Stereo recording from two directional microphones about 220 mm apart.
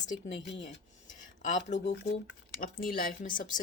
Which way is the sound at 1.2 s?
35° left (ahead or behind).